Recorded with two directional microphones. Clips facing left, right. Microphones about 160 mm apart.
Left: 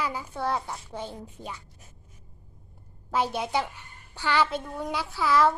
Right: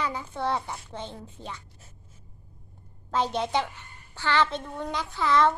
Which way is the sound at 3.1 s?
10° left (ahead or behind).